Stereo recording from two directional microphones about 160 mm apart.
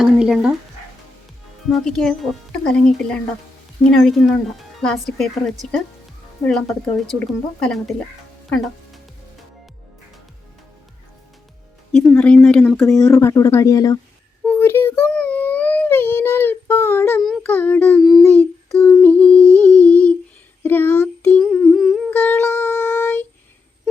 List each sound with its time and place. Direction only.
0.0 s speech: 5° right (ahead or behind)
1.6 s speech: centre (ahead or behind)
11.9 s speech: 5° left (ahead or behind)
13.1 s speech: 20° left (ahead or behind)
14.4 s child singing: 10° left (ahead or behind)
17.4 s a child's voice: 10° left (ahead or behind)
18.0 s a sound: centre (ahead or behind)
20.7 s humming: 15° left (ahead or behind)
22.1 s music: 10° left (ahead or behind)